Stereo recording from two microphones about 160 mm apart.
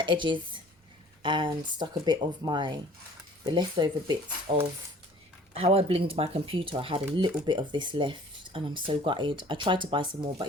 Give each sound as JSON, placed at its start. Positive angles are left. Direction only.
{"t": 0.0, "sound": "a woman's voice", "side_deg": -30}